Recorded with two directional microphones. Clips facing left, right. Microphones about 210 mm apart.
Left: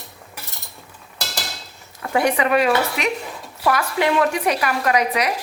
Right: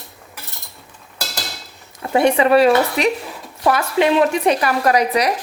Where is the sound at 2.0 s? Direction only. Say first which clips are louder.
Right 4 dB; 25° right (ahead or behind).